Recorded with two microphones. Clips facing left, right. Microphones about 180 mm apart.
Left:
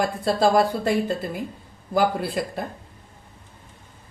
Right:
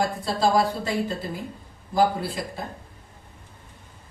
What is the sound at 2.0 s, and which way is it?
Speech, 60° left (ahead or behind).